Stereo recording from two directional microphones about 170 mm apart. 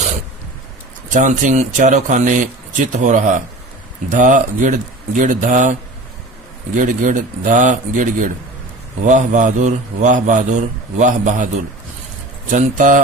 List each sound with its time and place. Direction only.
1.1 s a man's voice: 45° right (ahead or behind)
6.7 s a man's voice: 50° right (ahead or behind)
12.5 s a man's voice: 50° right (ahead or behind)